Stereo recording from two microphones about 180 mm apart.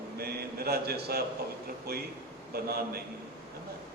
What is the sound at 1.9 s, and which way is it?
Mantra, 60° right (ahead or behind).